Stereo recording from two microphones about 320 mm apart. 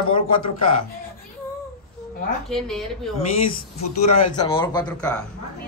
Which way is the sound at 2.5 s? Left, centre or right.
Centre.